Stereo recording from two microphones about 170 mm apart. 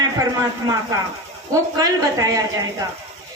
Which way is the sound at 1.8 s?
20° right (ahead or behind).